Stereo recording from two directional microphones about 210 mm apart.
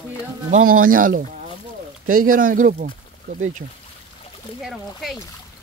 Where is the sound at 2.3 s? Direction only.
40° right (ahead or behind).